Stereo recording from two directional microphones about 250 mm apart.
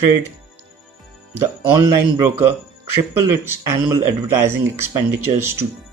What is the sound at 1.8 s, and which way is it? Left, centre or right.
Speech, centre.